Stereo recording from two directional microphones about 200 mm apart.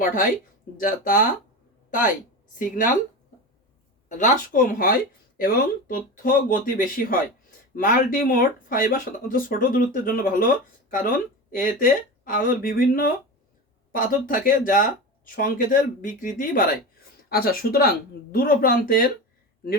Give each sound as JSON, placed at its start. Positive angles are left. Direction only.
{"t": 0.8, "sound": "a woman's voice", "side_deg": 45}
{"t": 4.2, "sound": "speech", "side_deg": 40}
{"t": 11.5, "sound": "speech", "side_deg": 45}